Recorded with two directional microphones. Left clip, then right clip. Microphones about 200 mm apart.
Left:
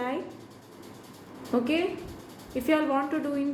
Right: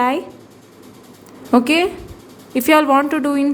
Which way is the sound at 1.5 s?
50° right (ahead or behind).